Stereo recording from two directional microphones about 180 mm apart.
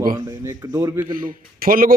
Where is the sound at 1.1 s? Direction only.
50° right (ahead or behind).